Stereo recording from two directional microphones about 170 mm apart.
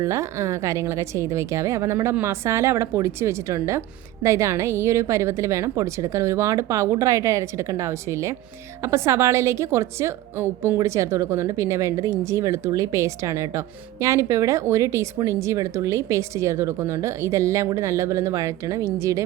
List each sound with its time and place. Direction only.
0.0 s a woman's voice: 15° right (ahead or behind)